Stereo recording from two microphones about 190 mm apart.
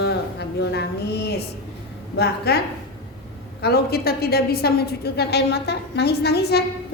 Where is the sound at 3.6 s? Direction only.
55° left (ahead or behind).